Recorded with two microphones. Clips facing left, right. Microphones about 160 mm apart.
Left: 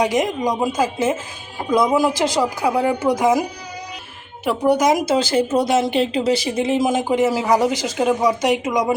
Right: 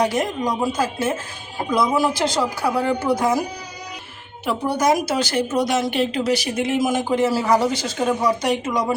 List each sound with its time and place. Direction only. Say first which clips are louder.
0.0 s speech: left 2 dB; 15° left (ahead or behind)
4.4 s speech: left 3 dB; 15° left (ahead or behind)